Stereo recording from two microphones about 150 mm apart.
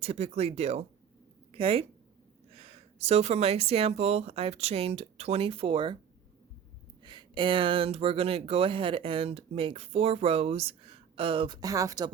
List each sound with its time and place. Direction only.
0.0 s speech: 45° right (ahead or behind)
7.0 s speech: 30° right (ahead or behind)